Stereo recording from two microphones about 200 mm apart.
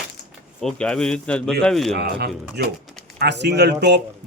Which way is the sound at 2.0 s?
50° right (ahead or behind).